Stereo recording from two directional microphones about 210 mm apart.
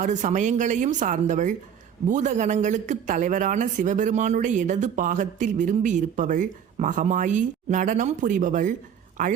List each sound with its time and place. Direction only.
0.0 s a man's voice: 35° right (ahead or behind)